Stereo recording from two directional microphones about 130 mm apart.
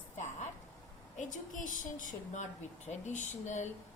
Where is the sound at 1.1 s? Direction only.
70° left (ahead or behind).